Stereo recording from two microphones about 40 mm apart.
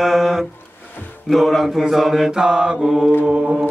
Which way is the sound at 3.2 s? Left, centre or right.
Right.